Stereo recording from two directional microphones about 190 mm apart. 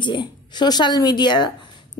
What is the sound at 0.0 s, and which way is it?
A woman's voice, 25° left (ahead or behind).